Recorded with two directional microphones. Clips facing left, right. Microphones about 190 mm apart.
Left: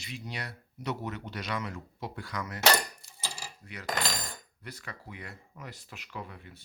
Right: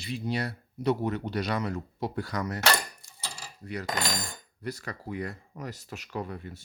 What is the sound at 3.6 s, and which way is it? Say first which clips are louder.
Speech: right 3 dB; 35° right (ahead or behind).